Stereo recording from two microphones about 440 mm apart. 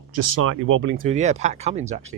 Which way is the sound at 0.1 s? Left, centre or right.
Right.